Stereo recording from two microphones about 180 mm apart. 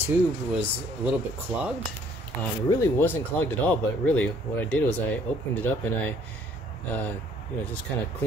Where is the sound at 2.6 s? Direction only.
15° left (ahead or behind).